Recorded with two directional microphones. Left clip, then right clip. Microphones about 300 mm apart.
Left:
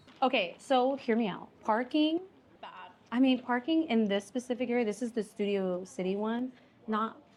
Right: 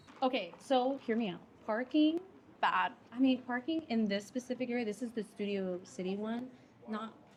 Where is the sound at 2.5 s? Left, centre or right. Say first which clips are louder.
Right 16 dB; right.